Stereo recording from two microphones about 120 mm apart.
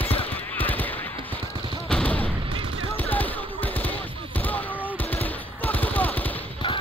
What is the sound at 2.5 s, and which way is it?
Gunshot, 50° right (ahead or behind).